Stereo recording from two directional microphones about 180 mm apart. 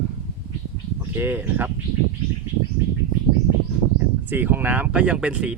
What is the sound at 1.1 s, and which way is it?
Speech, 10° right (ahead or behind).